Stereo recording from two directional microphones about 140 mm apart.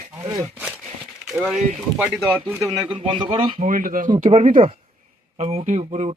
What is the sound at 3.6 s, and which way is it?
Speech, 75° right (ahead or behind).